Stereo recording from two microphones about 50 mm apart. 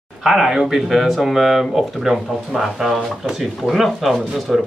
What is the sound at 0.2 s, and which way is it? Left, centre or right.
Speech, centre.